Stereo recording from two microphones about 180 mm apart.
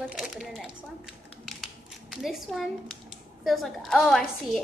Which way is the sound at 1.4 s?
Centre (ahead or behind).